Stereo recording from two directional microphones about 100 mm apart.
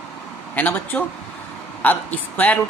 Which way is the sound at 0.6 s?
15° left (ahead or behind).